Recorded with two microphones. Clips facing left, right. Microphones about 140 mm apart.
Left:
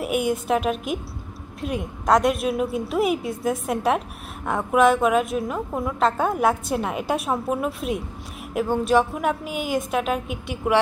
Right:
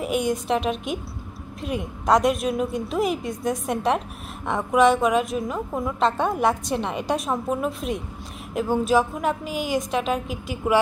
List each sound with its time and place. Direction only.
0.0 s a woman's voice: 5° left (ahead or behind)